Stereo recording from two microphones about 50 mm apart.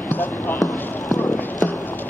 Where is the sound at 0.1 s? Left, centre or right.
Left.